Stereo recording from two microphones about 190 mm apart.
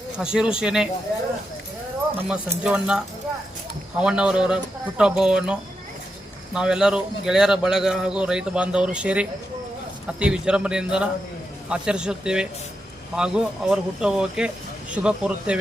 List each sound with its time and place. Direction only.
0.2 s a man's voice: 5° right (ahead or behind)
2.3 s a man's voice: 5° right (ahead or behind)